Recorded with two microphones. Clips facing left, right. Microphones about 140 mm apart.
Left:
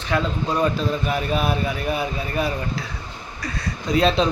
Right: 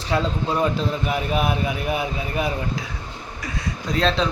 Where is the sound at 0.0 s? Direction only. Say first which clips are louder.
Even; 30° right (ahead or behind).